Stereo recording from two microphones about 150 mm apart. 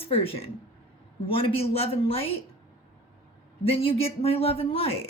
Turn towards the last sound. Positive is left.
turn(degrees=40)  # may be behind; listen again after turning